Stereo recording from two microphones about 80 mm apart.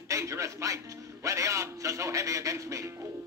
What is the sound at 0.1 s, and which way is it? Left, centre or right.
Music, right.